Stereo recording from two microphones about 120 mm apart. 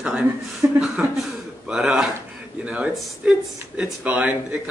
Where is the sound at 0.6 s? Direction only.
25° right (ahead or behind).